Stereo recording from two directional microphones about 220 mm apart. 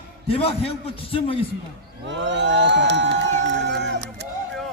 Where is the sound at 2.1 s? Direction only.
55° right (ahead or behind).